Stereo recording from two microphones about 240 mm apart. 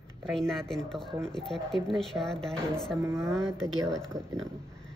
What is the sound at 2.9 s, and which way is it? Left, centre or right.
Speech, centre.